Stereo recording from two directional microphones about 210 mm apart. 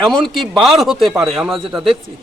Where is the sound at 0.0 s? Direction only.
Centre (ahead or behind).